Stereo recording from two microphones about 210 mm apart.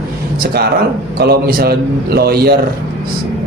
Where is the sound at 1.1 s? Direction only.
50° right (ahead or behind).